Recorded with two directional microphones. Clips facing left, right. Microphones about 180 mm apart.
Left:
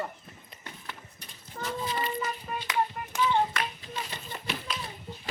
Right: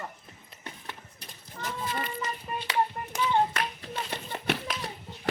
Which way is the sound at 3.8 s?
60° right (ahead or behind).